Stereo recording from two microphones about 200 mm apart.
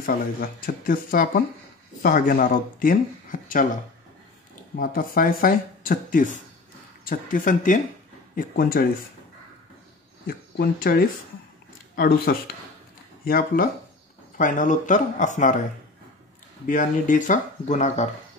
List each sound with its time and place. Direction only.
0.0 s speech: 45° left (ahead or behind)
4.7 s speech: 45° left (ahead or behind)
10.2 s speech: 45° left (ahead or behind)
16.6 s speech: 40° left (ahead or behind)